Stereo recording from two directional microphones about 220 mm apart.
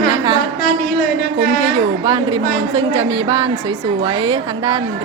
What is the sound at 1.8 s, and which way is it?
A woman's voice, 20° right (ahead or behind).